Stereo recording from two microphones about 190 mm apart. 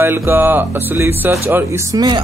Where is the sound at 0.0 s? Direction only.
10° right (ahead or behind).